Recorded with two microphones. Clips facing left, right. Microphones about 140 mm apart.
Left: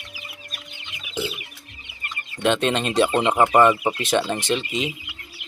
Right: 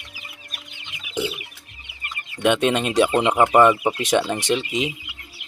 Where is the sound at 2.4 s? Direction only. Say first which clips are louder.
Right 2 dB; 10° right (ahead or behind).